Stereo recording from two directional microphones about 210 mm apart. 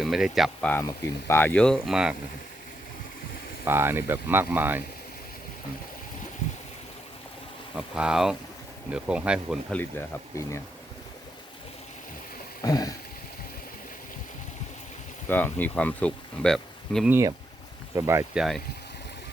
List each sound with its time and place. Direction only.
0.0 s speech: centre (ahead or behind)
3.7 s speech: 10° right (ahead or behind)
7.8 s speech: 5° right (ahead or behind)
12.6 s speech: 15° left (ahead or behind)
15.3 s speech: 10° left (ahead or behind)
17.1 s speech: 15° right (ahead or behind)
18.3 s speech: centre (ahead or behind)